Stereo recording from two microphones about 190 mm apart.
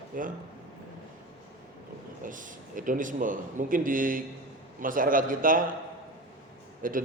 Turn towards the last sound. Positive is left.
turn(degrees=-45)  # may be behind; listen again after turning